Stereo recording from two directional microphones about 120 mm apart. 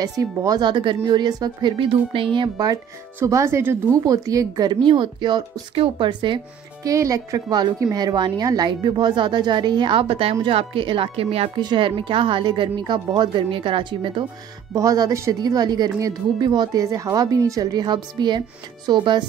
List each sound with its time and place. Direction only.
0.0 s speech: 30° right (ahead or behind); by 2.2 s 45° right (ahead or behind)
2.3 s speech: 35° right (ahead or behind)
6.9 s a woman's voice: 30° right (ahead or behind); by 11.5 s 55° right (ahead or behind)
11.5 s a woman's voice: 40° right (ahead or behind)
14.7 s speech: 30° right (ahead or behind)